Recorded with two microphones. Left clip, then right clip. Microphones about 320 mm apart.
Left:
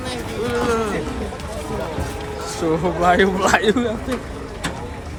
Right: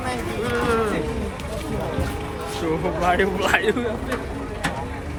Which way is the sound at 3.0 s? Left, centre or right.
Centre.